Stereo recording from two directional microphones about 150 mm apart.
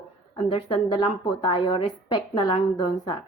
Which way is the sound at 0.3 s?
35° left (ahead or behind).